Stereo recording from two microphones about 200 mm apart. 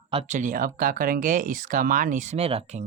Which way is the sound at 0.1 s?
35° right (ahead or behind).